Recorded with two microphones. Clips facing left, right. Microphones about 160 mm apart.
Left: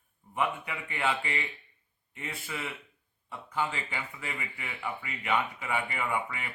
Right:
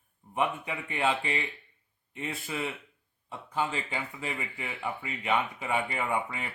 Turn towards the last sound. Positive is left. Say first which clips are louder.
# right 1 dB
turn(degrees=-25)  # may be behind; listen again after turning